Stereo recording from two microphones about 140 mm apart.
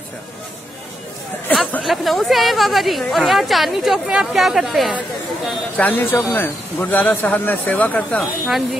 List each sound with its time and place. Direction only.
1.5 s speech: 5° left (ahead or behind)
5.8 s speech: 10° left (ahead or behind)